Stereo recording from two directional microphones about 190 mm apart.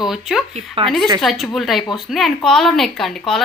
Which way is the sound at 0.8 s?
30° right (ahead or behind).